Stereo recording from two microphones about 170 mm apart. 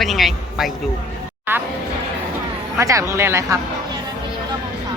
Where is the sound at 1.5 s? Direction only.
15° right (ahead or behind).